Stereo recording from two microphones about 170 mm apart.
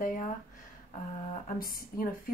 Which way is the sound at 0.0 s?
50° left (ahead or behind).